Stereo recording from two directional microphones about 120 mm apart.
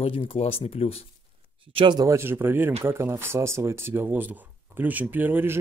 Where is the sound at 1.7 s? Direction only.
40° right (ahead or behind).